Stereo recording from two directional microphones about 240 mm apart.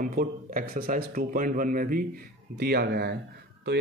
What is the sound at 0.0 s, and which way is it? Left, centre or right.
A man's voice, right.